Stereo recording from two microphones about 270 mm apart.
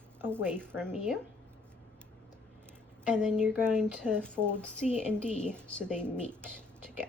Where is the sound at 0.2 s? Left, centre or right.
Centre.